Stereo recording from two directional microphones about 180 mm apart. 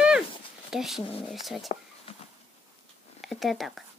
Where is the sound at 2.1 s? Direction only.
30° left (ahead or behind).